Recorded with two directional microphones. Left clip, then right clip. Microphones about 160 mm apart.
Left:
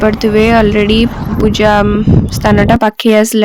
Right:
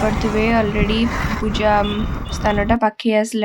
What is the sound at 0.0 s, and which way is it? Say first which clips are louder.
Speech: left 9 dB; 40° left (ahead or behind).